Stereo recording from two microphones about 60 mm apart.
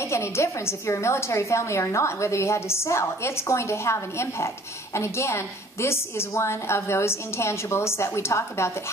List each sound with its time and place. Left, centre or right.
0.0 s a woman's voice: left